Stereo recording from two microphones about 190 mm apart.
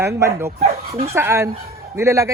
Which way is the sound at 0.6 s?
35° right (ahead or behind).